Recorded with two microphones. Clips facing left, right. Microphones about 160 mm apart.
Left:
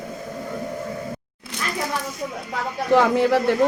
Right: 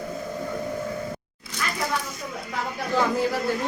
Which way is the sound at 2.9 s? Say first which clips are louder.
Left 7 dB; 75° left (ahead or behind).